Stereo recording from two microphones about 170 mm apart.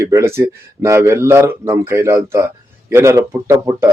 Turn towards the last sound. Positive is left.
turn(degrees=-15)  # may be behind; listen again after turning